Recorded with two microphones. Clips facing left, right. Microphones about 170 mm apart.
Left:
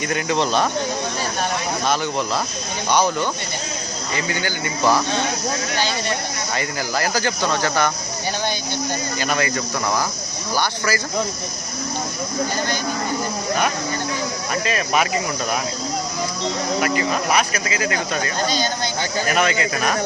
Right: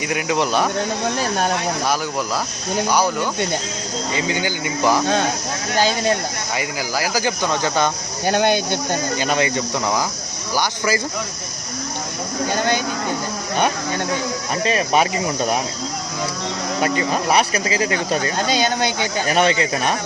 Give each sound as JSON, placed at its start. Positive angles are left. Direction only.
{"t": 0.1, "sound": "speech", "side_deg": -10}
{"t": 2.9, "sound": "speech", "side_deg": -10}
{"t": 6.6, "sound": "speech", "side_deg": -10}
{"t": 8.3, "sound": "speech", "side_deg": -60}
{"t": 9.1, "sound": "speech", "side_deg": -20}
{"t": 14.6, "sound": "speech", "side_deg": -30}
{"t": 16.8, "sound": "speech", "side_deg": -30}
{"t": 19.3, "sound": "speech", "side_deg": -30}